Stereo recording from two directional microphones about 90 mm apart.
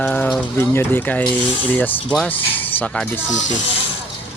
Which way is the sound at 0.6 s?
25° left (ahead or behind).